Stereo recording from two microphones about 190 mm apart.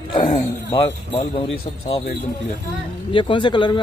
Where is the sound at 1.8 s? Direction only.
30° left (ahead or behind).